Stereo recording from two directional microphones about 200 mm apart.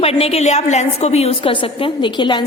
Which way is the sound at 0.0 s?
30° left (ahead or behind).